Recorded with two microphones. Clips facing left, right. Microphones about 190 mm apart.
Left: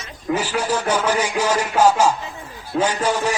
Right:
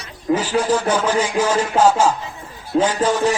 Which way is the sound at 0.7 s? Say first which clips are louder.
Right 3 dB; 10° right (ahead or behind).